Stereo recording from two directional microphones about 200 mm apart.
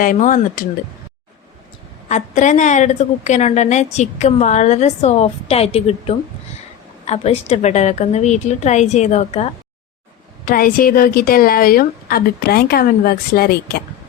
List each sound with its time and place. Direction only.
0.0 s speech: 45° left (ahead or behind)
2.0 s a woman's voice: 35° left (ahead or behind)
10.4 s speech: 45° left (ahead or behind)